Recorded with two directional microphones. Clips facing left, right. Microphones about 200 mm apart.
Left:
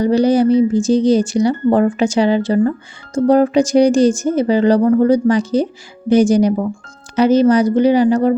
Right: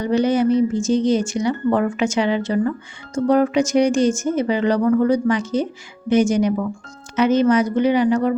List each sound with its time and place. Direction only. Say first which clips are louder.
0.0 s speech: left 5 dB; 35° left (ahead or behind)